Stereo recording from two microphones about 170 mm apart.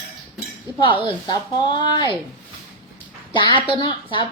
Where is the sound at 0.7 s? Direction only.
30° left (ahead or behind).